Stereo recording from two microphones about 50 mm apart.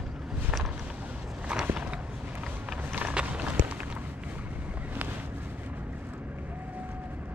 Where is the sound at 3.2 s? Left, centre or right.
Right.